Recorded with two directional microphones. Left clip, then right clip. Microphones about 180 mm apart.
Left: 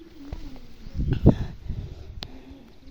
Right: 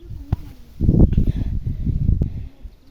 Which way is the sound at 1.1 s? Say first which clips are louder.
Left 6 dB; 5° right (ahead or behind).